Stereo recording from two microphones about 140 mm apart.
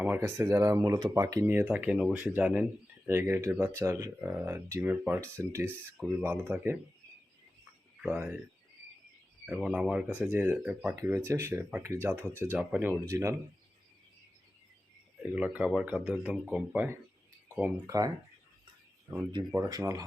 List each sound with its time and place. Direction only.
0.2 s speech: 20° right (ahead or behind)
8.0 s speech: 10° right (ahead or behind)
9.5 s speech: 5° right (ahead or behind)
15.2 s speech: 10° right (ahead or behind)
17.8 s speech: 25° right (ahead or behind)
19.5 s speech: 25° right (ahead or behind)